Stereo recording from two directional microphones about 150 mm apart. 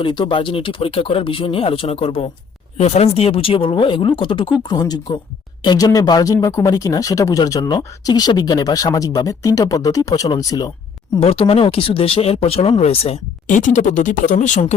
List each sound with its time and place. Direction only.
0.0 s speech: 35° left (ahead or behind)
11.2 s speech: 40° left (ahead or behind)
13.5 s speech: 55° left (ahead or behind)